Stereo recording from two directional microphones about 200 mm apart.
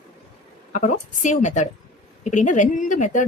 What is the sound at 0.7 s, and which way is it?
Speech, 40° left (ahead or behind).